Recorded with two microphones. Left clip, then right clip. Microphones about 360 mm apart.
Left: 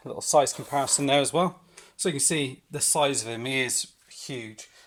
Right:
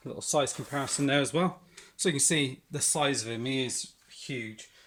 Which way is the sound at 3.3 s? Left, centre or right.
Left.